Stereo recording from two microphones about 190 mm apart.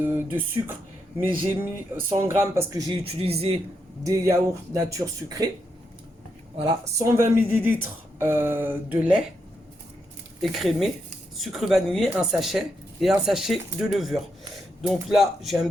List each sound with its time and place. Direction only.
0.0 s speech: 10° right (ahead or behind); by 3.6 s 30° right (ahead or behind)
4.0 s speech: 15° right (ahead or behind)
7.0 s speech: 15° right (ahead or behind)
10.4 s speech: centre (ahead or behind)